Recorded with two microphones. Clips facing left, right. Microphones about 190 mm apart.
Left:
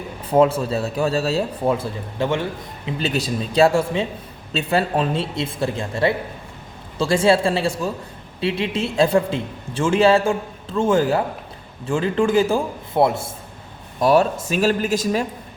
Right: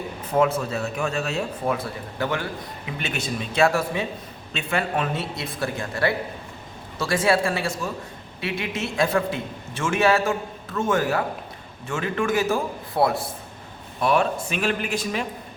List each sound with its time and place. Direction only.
0.3 s a man's voice: 30° left (ahead or behind)
14.0 s a man's voice: 35° left (ahead or behind)